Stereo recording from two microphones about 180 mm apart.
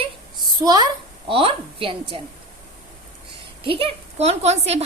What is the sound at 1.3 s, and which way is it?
Speech, 30° right (ahead or behind).